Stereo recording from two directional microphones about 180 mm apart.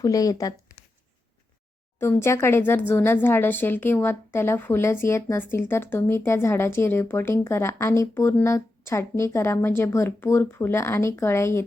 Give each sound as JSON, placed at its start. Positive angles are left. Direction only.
{"t": 0.0, "sound": "speech", "side_deg": 20}
{"t": 2.0, "sound": "speech", "side_deg": 15}